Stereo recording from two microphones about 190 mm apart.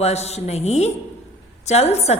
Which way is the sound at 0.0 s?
35° left (ahead or behind).